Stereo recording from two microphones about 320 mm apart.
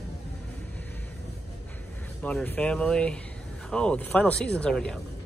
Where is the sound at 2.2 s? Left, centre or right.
Centre.